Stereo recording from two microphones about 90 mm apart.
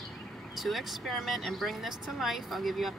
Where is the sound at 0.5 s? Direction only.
Centre (ahead or behind).